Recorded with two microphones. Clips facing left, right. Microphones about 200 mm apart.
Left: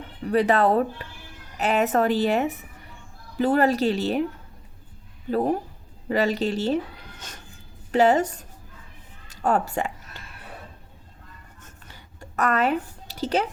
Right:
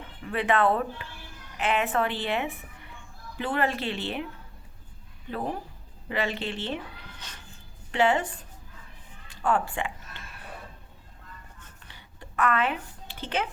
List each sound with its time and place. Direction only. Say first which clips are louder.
0.2 s speech: left 5 dB; 40° left (ahead or behind)
5.3 s speech: left 9 dB; 40° left (ahead or behind)
9.2 s music: left 3 dB; 40° left (ahead or behind)
11.9 s a sound: left 4 dB; 45° left (ahead or behind)